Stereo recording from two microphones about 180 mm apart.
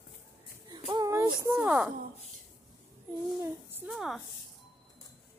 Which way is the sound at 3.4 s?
10° right (ahead or behind).